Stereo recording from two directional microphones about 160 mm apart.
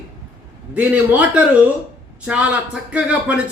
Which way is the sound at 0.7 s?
10° right (ahead or behind).